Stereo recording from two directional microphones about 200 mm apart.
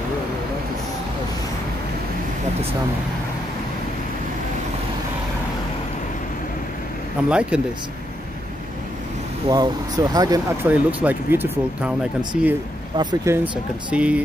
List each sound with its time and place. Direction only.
7.2 s speech: 5° right (ahead or behind)
9.5 s speech: 20° right (ahead or behind)
10.7 s speech: 5° right (ahead or behind)
12.9 s speech: 20° right (ahead or behind)